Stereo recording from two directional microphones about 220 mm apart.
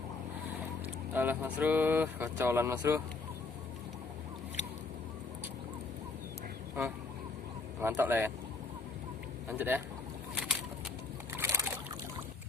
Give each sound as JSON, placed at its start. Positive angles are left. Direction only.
{"t": 1.1, "sound": "speech", "side_deg": -10}
{"t": 7.8, "sound": "speech", "side_deg": -10}
{"t": 9.5, "sound": "speech", "side_deg": -10}
{"t": 10.3, "sound": "bird", "side_deg": -5}
{"t": 11.3, "sound": "boat", "side_deg": -10}